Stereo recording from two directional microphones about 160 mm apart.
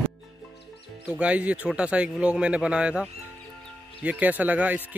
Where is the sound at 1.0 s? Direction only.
10° right (ahead or behind).